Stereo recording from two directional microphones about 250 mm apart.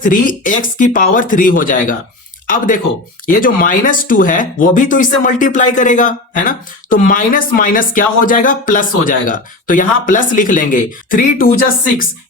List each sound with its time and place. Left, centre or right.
0.0 s speech: left